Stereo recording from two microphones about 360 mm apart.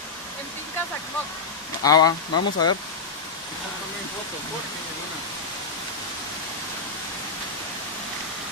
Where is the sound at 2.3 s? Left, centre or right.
Left.